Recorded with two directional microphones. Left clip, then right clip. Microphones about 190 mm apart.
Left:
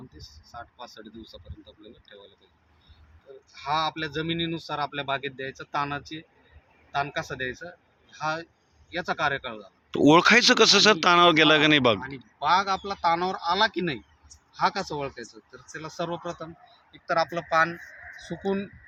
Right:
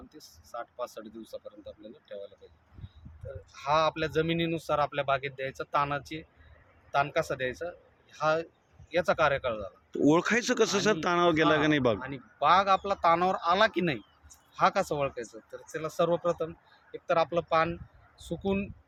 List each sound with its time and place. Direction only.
0.2 s speech: 35° right (ahead or behind)
3.5 s speech: 35° right (ahead or behind)
9.9 s speech: 20° left (ahead or behind)
11.9 s speech: 30° right (ahead or behind)